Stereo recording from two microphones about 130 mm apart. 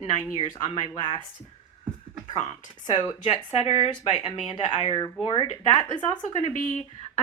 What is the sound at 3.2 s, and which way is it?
Speech, 55° left (ahead or behind).